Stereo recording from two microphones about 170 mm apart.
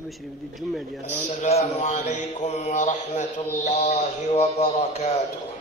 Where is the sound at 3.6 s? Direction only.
45° left (ahead or behind).